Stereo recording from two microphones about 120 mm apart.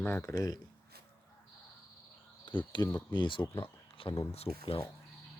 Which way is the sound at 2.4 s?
40° left (ahead or behind).